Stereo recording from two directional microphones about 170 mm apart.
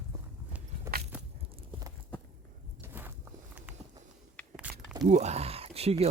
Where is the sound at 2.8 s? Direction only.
10° right (ahead or behind).